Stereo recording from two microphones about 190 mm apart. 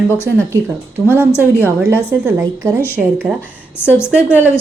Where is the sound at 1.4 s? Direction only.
10° right (ahead or behind).